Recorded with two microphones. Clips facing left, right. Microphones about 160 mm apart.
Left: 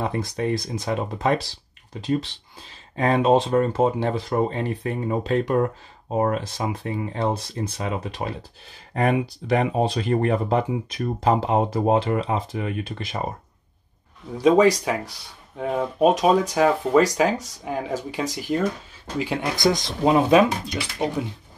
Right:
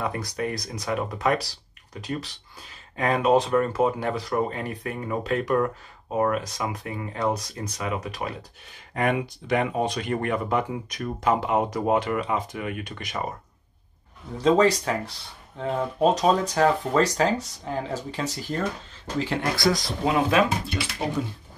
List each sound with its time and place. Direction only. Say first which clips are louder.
0.0 s speech: left 3 dB; 25° left (ahead or behind)
14.4 s speech: left 3 dB; 10° left (ahead or behind)